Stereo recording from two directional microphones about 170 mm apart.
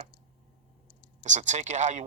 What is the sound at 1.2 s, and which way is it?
Speech, 45° right (ahead or behind).